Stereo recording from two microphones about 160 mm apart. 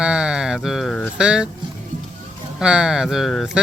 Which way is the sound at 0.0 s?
5° right (ahead or behind).